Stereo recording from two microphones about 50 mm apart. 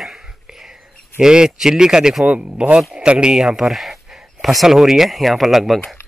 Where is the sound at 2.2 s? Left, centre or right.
Right.